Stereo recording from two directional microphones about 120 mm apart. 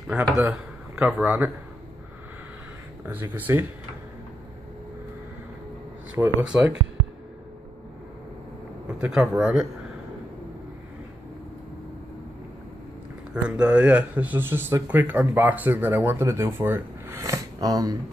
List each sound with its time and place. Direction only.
0.0 s a man's voice: 10° right (ahead or behind)
3.1 s speech: 15° right (ahead or behind)
6.2 s speech: 20° right (ahead or behind)
8.8 s speech: 10° right (ahead or behind)
13.3 s speech: 10° right (ahead or behind); by 17.9 s 30° right (ahead or behind)